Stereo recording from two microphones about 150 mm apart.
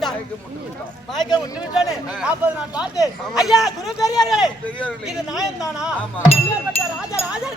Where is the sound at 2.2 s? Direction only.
10° right (ahead or behind).